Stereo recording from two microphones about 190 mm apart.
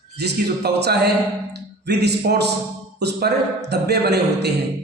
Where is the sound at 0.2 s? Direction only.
60° right (ahead or behind).